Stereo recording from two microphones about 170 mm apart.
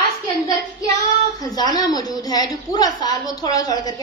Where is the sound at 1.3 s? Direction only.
25° left (ahead or behind).